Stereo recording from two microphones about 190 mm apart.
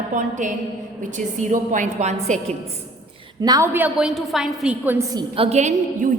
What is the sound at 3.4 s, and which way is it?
A woman's voice, 15° right (ahead or behind).